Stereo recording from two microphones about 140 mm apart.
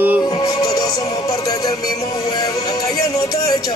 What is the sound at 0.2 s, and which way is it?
Music, 30° left (ahead or behind).